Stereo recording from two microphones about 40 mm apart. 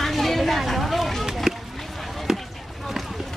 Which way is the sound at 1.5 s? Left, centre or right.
Centre.